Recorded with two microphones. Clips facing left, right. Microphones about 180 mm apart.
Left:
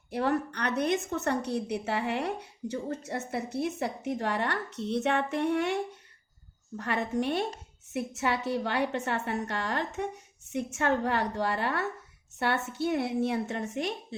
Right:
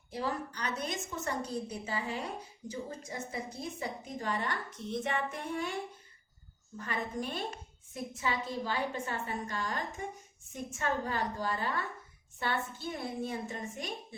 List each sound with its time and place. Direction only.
0.1 s a woman's voice: 65° left (ahead or behind)